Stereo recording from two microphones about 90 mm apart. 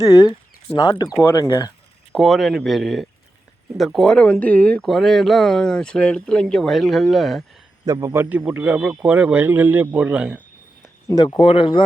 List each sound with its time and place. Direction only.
0.0 s speech: 45° left (ahead or behind)
1.2 s speech: 25° left (ahead or behind)
1.5 s speech: 40° left (ahead or behind)
2.1 s speech: centre (ahead or behind); by 4.9 s 15° left (ahead or behind)
4.9 s speech: centre (ahead or behind)
8.0 s a man's voice: 30° right (ahead or behind)
8.3 s speech: 15° right (ahead or behind)
11.1 s speech: 45° left (ahead or behind)
11.3 s speech: 85° left